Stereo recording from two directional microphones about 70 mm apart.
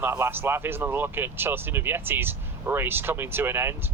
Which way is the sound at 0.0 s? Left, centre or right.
Right.